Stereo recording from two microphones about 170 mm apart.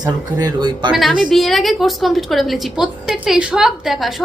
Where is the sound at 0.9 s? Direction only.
Centre (ahead or behind).